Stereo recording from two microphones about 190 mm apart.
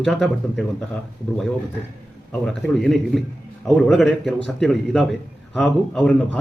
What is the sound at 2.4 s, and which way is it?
Speech, centre (ahead or behind).